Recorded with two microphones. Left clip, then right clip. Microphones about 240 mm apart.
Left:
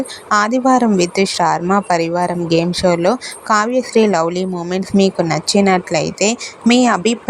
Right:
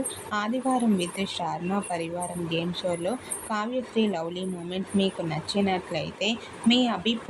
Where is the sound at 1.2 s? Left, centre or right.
Left.